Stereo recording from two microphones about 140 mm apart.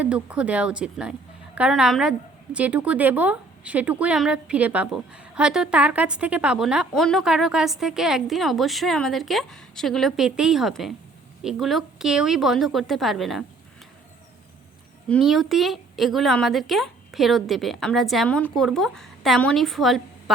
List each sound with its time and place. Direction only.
0.0 s a woman's voice: 10° right (ahead or behind)
15.2 s a woman's voice: centre (ahead or behind)